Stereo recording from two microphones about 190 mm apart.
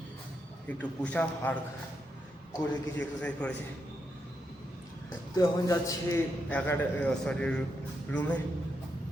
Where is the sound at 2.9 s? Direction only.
5° left (ahead or behind).